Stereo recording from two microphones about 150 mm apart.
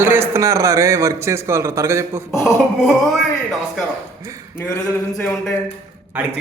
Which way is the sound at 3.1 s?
Centre (ahead or behind).